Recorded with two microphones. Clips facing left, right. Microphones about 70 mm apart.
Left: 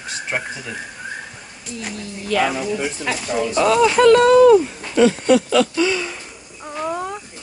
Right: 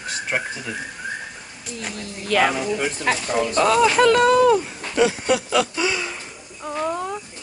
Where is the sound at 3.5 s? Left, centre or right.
Centre.